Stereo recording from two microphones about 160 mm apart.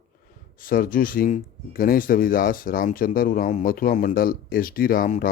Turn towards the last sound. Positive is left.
turn(degrees=65)  # may be behind; listen again after turning